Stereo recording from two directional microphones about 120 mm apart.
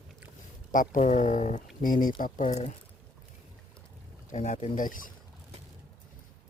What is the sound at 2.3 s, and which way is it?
Speech, 80° left.